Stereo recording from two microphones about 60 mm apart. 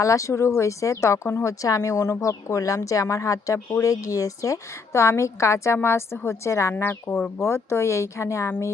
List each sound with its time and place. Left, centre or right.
0.0 s a woman's voice: left